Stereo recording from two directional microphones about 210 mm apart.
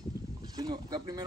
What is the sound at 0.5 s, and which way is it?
Speech, 20° right (ahead or behind).